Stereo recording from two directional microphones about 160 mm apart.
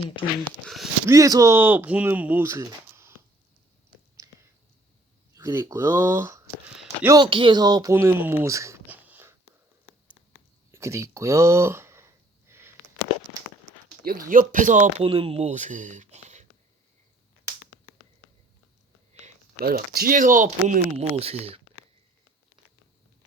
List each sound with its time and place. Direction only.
0.1 s speech: 30° left (ahead or behind)
0.6 s speech: centre (ahead or behind)
1.0 s speech: 20° right (ahead or behind)
5.3 s speech: 20° right (ahead or behind)
7.2 s speech: 35° right (ahead or behind); by 9.3 s 10° right (ahead or behind)
10.7 s a sound: 15° right (ahead or behind)
14.0 s speech: 65° right (ahead or behind)
15.0 s speech: 35° right (ahead or behind)
19.9 s speech: 65° right (ahead or behind)
20.9 s speech: 40° right (ahead or behind)